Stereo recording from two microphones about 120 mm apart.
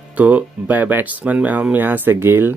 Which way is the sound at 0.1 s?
10° right (ahead or behind).